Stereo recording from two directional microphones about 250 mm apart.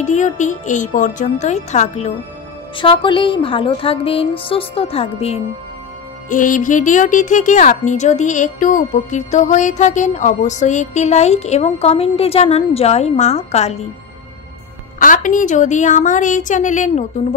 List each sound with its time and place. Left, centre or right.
0.0 s speech: left
15.0 s a woman's voice: left